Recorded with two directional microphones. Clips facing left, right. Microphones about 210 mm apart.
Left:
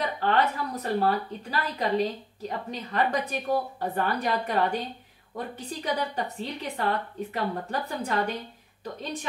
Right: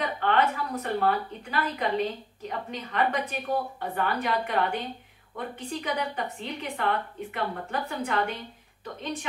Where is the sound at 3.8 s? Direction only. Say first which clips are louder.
Left 1 dB; 35° left (ahead or behind).